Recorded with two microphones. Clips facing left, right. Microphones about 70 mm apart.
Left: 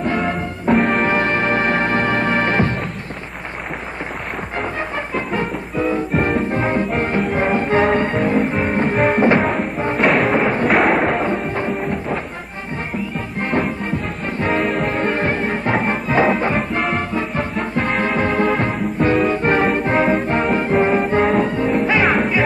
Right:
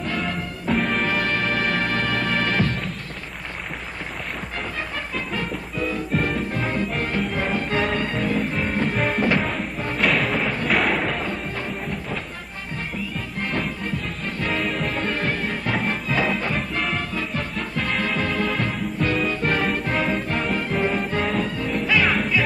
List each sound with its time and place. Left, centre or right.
0.0 s music: left
0.7 s music: centre
1.0 s music: left
5.1 s music: left
10.0 s music: centre
10.4 s music: left
10.7 s thump: left
11.1 s music: left
13.4 s music: left
14.7 s music: centre
15.0 s music: left